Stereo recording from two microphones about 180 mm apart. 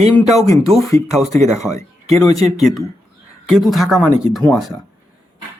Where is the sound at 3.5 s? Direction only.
Centre (ahead or behind).